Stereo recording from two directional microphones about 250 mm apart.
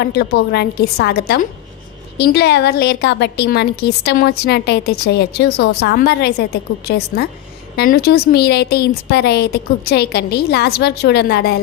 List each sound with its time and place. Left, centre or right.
0.0 s a woman's voice: left